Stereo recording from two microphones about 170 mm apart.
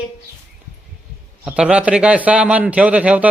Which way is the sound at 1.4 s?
5° right (ahead or behind).